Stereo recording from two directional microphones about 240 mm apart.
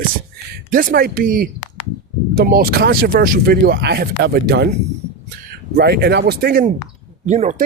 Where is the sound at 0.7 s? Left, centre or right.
Right.